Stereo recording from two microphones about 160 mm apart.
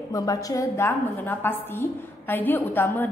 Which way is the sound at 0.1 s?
20° left (ahead or behind).